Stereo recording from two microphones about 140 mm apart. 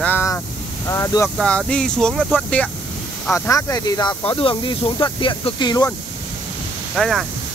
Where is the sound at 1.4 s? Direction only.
5° left (ahead or behind).